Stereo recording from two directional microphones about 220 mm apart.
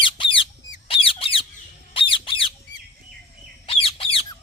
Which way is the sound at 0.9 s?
25° left (ahead or behind).